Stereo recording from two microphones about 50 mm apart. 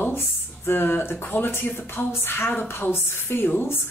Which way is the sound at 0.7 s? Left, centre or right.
Left.